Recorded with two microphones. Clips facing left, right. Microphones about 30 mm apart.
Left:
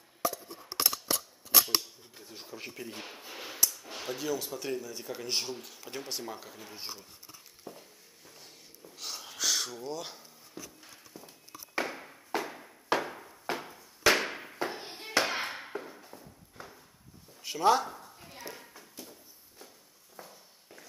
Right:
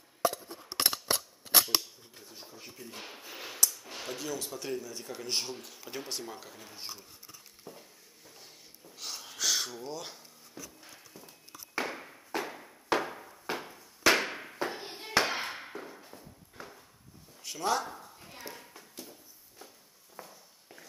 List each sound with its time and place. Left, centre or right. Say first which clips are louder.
0.5 s scissors: even; centre
0.7 s scissors: right 1 dB; right
1.7 s speech: even; centre
2.5 s speech: left 6 dB; left
3.0 s speech: left 1 dB; centre
7.7 s a sound: left 2 dB; centre
10.8 s walk: left 1 dB; centre
11.8 s a sound: even; centre
15.8 s clip-clop: even; centre
17.4 s speech: left 6 dB; centre
17.8 s a sound: left 1 dB; centre
20.2 s walk: right 1 dB; centre